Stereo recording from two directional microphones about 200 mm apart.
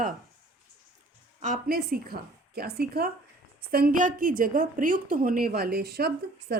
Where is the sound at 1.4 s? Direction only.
45° right (ahead or behind).